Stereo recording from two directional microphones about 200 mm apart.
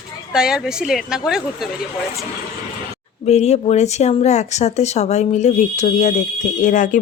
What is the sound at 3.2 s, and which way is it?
Speech, 35° left (ahead or behind).